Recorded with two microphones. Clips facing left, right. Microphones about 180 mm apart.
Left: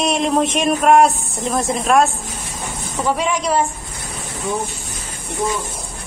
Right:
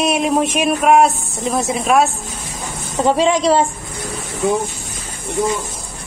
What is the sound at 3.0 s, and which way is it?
Speech, 25° right (ahead or behind).